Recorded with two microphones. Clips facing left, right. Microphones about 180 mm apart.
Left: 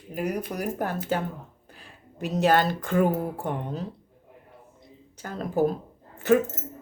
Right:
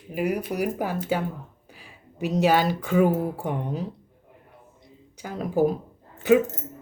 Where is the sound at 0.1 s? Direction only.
5° right (ahead or behind).